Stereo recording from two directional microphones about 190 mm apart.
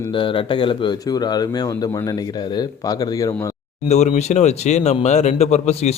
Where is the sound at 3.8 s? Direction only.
35° left (ahead or behind).